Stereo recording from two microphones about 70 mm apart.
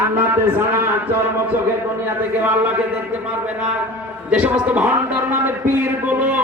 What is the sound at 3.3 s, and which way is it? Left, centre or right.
A man's voice, centre.